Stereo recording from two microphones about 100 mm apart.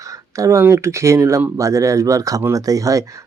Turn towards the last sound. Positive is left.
turn(degrees=-35)  # may be behind; listen again after turning